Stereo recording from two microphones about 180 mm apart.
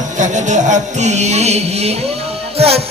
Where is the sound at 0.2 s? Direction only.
45° right (ahead or behind).